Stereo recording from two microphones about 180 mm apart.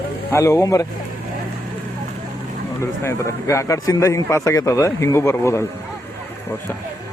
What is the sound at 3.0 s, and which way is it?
A man's voice, 15° left (ahead or behind).